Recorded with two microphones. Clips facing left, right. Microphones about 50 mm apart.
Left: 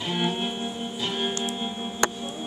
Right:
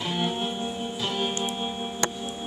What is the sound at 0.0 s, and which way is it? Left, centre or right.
Music, centre.